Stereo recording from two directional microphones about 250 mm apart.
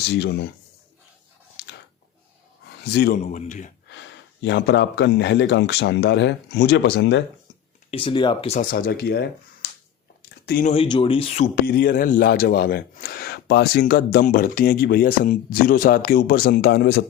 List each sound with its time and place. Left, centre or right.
0.1 s speech: left
1.6 s chewing: left
2.8 s speech: left
3.2 s speech: left
3.8 s speech: left
7.9 s speech: left
8.7 s speech: left
10.4 s speech: left
10.7 s speech: left
11.6 s speech: left